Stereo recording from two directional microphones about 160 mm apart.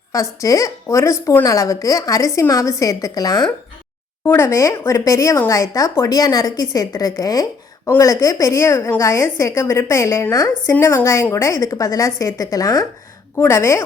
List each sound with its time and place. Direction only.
0.1 s a woman's voice: 20° left (ahead or behind)